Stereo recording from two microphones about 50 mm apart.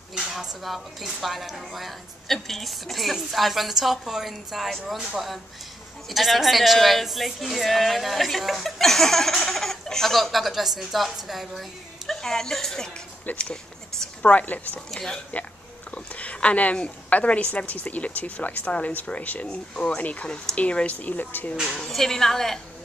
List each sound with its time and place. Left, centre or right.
0.1 s speech: centre
12.1 s a woman's voice: centre
13.3 s speech: left
14.9 s a woman's voice: centre
15.9 s a sound: left
17.5 s speech: left
21.6 s a woman's voice: centre